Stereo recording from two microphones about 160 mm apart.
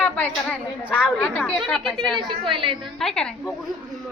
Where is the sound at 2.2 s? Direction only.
30° right (ahead or behind).